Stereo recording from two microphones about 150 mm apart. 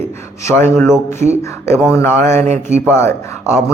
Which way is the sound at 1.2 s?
50° right (ahead or behind).